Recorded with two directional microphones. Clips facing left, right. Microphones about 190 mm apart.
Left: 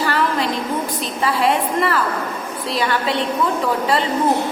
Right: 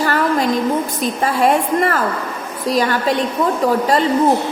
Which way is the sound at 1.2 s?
45° right (ahead or behind).